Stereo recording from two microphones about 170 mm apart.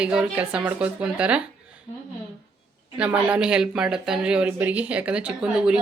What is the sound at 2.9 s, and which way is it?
Speech, 5° right (ahead or behind).